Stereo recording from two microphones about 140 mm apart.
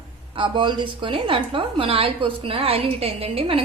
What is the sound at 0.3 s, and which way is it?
A woman's voice, 35° right (ahead or behind).